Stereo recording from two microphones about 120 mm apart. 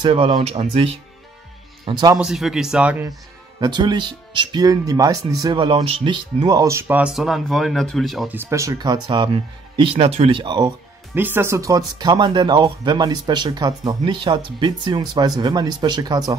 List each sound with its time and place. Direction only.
0.1 s speech: 55° right (ahead or behind)
1.9 s speech: 35° right (ahead or behind)
2.1 s speech: 5° right (ahead or behind)
3.5 s speech: 40° right (ahead or behind); by 8.3 s centre (ahead or behind)
8.3 s speech: 20° right (ahead or behind); by 10.7 s 35° right (ahead or behind)
11.1 s speech: 15° right (ahead or behind); by 16.3 s 35° right (ahead or behind)